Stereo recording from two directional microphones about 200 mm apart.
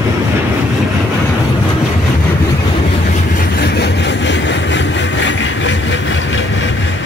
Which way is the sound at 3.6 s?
60° left (ahead or behind).